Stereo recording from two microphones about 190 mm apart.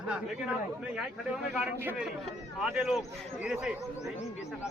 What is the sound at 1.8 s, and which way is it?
Speech, 10° right (ahead or behind).